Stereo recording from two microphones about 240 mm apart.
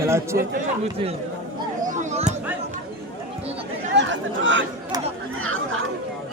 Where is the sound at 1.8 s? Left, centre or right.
Right.